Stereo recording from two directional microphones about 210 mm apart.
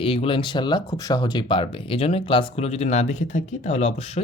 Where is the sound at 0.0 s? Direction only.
25° left (ahead or behind).